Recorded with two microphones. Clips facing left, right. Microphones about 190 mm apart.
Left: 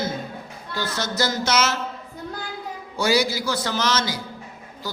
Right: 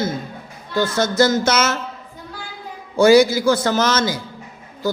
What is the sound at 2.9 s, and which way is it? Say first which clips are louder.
A man's voice: right 10 dB; 50° right (ahead or behind).